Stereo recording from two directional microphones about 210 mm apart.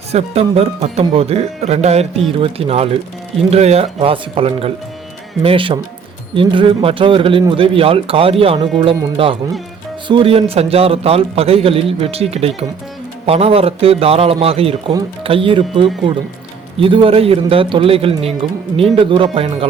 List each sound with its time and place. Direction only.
0.1 s a man's voice: 30° right (ahead or behind)